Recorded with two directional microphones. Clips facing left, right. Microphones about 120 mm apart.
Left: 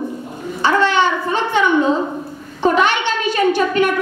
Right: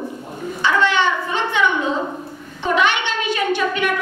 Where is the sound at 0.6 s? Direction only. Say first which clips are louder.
Left 3 dB; 40° left (ahead or behind).